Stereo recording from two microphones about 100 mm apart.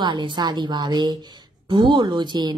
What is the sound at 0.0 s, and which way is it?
Speech, 50° right (ahead or behind).